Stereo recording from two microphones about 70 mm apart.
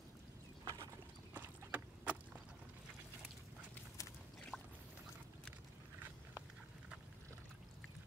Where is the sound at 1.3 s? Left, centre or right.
Right.